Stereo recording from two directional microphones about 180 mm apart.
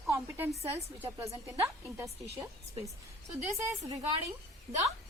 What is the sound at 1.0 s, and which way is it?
A woman's voice, 15° right (ahead or behind).